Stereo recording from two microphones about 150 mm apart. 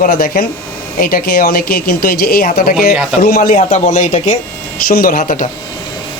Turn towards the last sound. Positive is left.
turn(degrees=65)  # may be behind; listen again after turning